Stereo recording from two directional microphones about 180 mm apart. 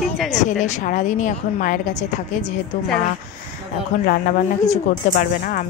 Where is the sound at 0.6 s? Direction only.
45° left (ahead or behind).